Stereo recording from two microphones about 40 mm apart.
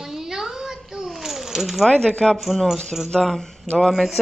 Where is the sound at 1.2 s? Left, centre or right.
Centre.